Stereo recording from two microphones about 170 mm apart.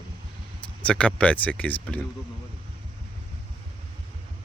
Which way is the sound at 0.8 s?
5° left (ahead or behind).